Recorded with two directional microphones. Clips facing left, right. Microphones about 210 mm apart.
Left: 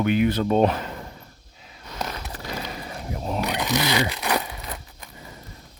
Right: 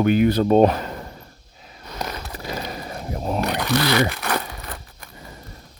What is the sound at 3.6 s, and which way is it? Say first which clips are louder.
Crumpling: right 4 dB; 15° left (ahead or behind).